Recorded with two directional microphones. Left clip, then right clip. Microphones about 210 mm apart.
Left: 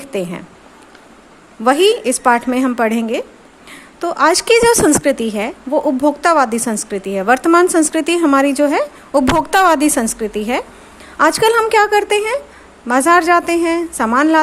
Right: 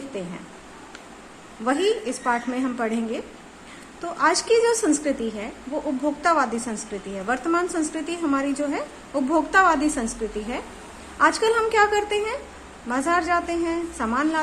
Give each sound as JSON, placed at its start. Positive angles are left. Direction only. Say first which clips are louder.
{"t": 1.6, "sound": "a woman's voice", "louder": "left 11 dB", "side_deg": 45}